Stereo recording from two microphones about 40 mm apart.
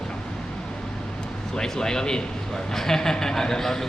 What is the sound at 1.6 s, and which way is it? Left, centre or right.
Speech, centre.